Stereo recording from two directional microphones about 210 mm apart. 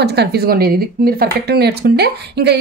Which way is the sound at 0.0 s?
50° right (ahead or behind).